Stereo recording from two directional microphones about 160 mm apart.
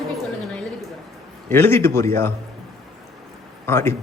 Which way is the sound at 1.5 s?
15° left (ahead or behind).